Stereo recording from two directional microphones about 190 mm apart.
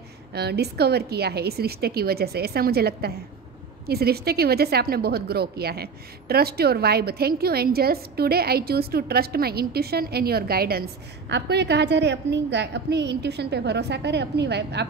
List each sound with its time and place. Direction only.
0.3 s a woman's voice: 60° right (ahead or behind)